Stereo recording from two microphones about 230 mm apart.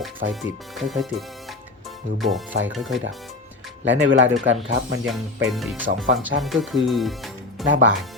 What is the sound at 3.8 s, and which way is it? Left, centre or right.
Speech, right.